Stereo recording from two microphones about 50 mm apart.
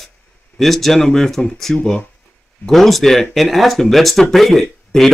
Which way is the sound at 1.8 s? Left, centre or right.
Left.